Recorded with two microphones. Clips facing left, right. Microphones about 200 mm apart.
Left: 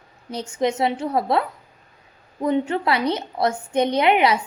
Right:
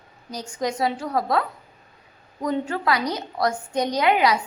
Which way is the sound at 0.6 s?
25° left (ahead or behind).